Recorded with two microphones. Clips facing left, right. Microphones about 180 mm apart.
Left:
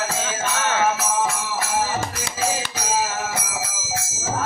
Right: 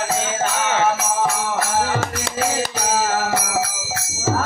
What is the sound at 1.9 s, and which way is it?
Music, 70° right (ahead or behind).